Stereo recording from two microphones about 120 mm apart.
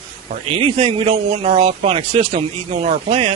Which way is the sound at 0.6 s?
50° right (ahead or behind).